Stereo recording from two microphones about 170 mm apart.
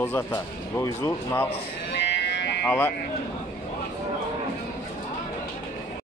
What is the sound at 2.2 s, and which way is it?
Music, 90° left.